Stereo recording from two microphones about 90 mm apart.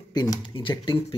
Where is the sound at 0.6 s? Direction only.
65° left (ahead or behind).